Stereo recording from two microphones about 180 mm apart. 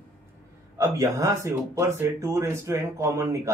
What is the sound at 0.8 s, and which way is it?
Speech, 15° right (ahead or behind).